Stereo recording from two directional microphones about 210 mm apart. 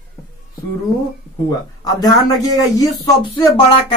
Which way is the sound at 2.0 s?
15° left (ahead or behind).